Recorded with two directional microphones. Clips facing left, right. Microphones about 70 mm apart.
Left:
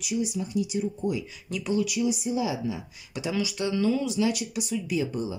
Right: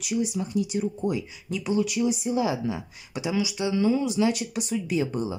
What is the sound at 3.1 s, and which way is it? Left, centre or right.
Speech, centre.